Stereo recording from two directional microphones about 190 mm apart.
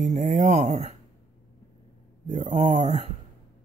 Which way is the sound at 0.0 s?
40° right (ahead or behind).